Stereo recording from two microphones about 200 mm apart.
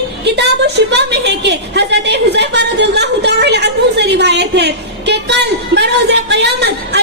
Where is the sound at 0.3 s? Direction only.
55° right (ahead or behind).